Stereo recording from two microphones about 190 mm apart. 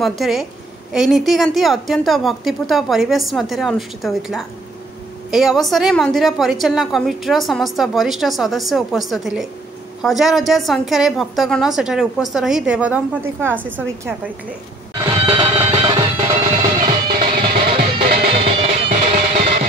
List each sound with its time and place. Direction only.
0.0 s a woman's voice: centre (ahead or behind)
15.0 s music: 25° right (ahead or behind)
17.1 s music: 35° right (ahead or behind)